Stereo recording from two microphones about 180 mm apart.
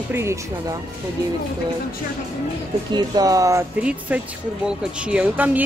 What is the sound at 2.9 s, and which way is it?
Speech, 20° right (ahead or behind).